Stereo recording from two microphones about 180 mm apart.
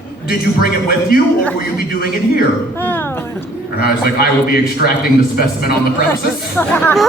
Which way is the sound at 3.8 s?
60° left (ahead or behind).